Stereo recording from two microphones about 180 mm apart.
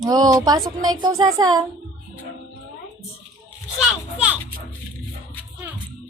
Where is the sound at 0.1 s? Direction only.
20° right (ahead or behind).